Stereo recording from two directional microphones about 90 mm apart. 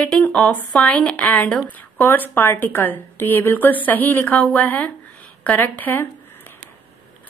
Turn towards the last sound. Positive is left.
turn(degrees=20)  # may be behind; listen again after turning